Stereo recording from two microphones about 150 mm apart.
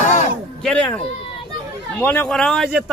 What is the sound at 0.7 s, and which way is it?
A man's voice, 5° left (ahead or behind).